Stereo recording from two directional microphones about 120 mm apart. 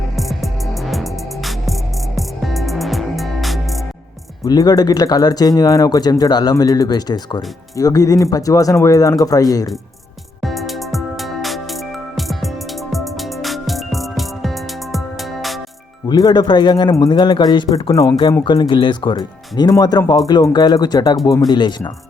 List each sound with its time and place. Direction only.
0.2 s music: centre (ahead or behind)
4.4 s speech: 35° left (ahead or behind)
10.4 s music: centre (ahead or behind)
16.0 s speech: 35° left (ahead or behind)
17.9 s speech: 25° left (ahead or behind)
18.4 s speech: 40° left (ahead or behind)